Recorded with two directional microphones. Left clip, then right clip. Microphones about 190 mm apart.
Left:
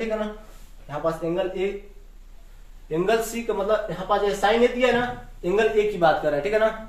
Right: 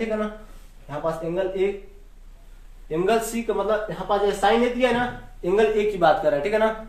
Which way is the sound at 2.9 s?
30° right (ahead or behind).